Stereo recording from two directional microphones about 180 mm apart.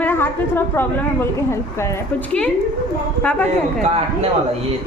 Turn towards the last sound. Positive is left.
turn(degrees=-35)  # may be behind; listen again after turning